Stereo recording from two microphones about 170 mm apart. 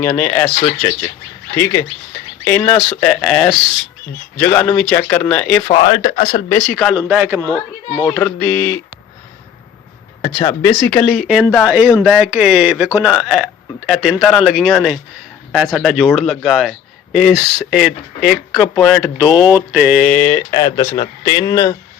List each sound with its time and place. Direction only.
0.0 s speech: 10° left (ahead or behind)
2.9 s a man's voice: 5° left (ahead or behind)
5.6 s speech: 35° left (ahead or behind)
6.7 s a man's voice: centre (ahead or behind)
7.1 s a man's voice: 10° right (ahead or behind)
8.0 s speech: 5° left (ahead or behind)
10.6 s a man's voice: 15° left (ahead or behind); by 20.0 s 10° right (ahead or behind)
20.0 s speech: 10° left (ahead or behind)